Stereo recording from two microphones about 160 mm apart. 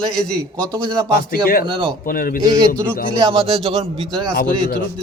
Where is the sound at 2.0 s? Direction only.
65° left (ahead or behind).